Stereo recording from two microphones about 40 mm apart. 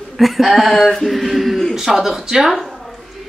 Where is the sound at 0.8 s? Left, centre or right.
Centre.